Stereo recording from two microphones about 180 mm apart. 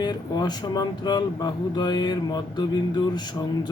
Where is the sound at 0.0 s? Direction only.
25° left (ahead or behind).